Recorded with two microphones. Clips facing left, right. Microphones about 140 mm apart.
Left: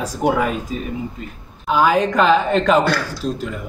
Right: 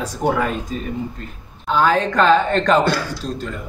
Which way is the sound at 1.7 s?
10° left (ahead or behind).